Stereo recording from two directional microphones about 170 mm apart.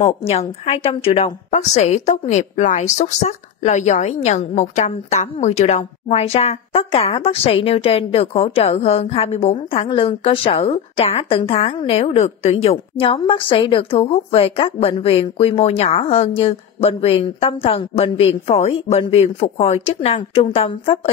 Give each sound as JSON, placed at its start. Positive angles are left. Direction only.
{"t": 0.3, "sound": "a woman's voice", "side_deg": 40}